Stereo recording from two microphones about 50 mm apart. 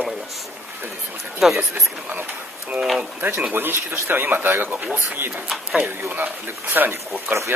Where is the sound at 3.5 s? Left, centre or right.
Right.